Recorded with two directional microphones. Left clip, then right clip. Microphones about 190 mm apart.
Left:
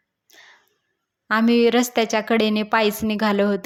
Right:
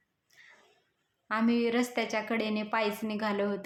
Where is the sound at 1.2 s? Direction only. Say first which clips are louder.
Left 12 dB; 40° left (ahead or behind).